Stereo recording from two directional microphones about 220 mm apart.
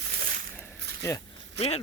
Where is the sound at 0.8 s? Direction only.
50° right (ahead or behind).